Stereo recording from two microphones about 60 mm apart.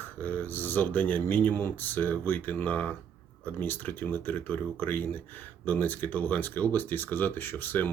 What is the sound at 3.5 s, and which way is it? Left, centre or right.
Speech, left.